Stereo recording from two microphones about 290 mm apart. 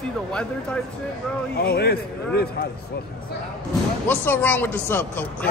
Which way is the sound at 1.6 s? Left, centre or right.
Left.